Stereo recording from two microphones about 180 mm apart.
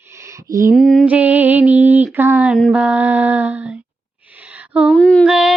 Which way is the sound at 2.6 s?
Centre (ahead or behind).